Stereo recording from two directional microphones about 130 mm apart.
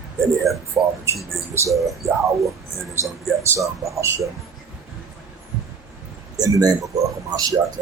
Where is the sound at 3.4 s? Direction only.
20° right (ahead or behind).